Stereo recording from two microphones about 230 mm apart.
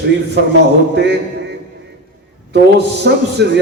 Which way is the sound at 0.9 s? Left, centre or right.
Right.